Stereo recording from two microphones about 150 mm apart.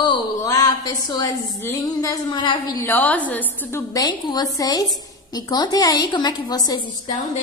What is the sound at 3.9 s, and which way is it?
A woman's voice, 25° left (ahead or behind).